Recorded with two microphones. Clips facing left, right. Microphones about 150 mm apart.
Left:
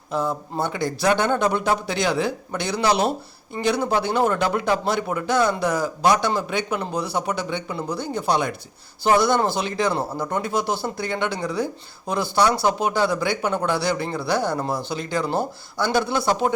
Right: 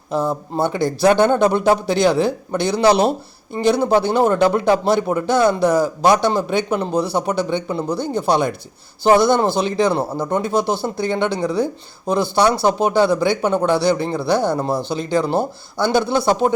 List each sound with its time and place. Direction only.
0.1 s speech: 30° right (ahead or behind)